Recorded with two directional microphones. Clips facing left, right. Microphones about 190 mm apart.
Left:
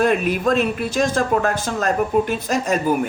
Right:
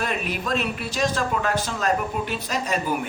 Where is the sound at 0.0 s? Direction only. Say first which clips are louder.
Left 10 dB; 50° left (ahead or behind).